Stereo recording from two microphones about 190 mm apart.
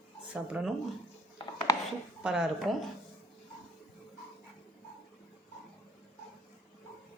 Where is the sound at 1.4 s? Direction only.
25° left (ahead or behind).